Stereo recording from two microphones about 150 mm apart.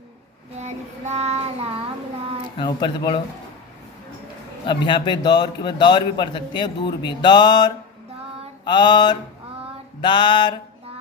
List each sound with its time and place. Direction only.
0.6 s child singing: 45° right (ahead or behind)
2.6 s a man's voice: 30° left (ahead or behind)
4.6 s a man's voice: 30° left (ahead or behind)
8.6 s mantra: 30° left (ahead or behind)
10.0 s a man's voice: 30° left (ahead or behind)